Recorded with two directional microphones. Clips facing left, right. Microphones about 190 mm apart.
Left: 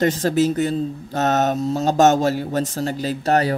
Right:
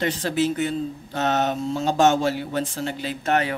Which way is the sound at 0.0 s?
45° left (ahead or behind).